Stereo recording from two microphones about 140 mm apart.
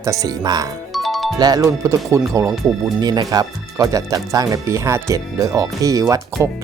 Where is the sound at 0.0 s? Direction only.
25° right (ahead or behind).